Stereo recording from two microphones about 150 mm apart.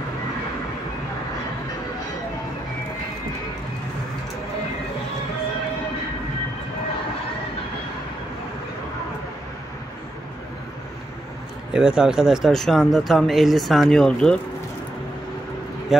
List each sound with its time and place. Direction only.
11.7 s speech: 5° right (ahead or behind)
15.9 s speech: centre (ahead or behind)